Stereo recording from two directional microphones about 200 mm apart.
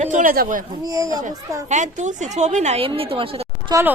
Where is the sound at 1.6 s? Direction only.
35° right (ahead or behind).